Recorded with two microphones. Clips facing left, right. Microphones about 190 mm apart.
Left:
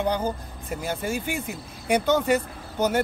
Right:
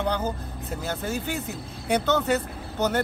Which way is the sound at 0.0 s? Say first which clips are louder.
Left 2 dB; 10° left (ahead or behind).